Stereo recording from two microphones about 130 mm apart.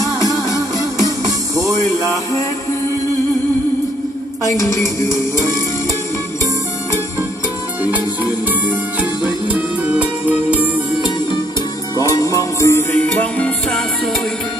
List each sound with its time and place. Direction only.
0.0 s music: 25° left (ahead or behind)
4.5 s music: 25° left (ahead or behind)
8.6 s music: 10° right (ahead or behind)
12.0 s music: 25° left (ahead or behind); by 13.8 s 10° left (ahead or behind)